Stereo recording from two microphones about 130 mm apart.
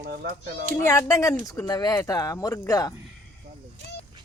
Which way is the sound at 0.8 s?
20° left (ahead or behind).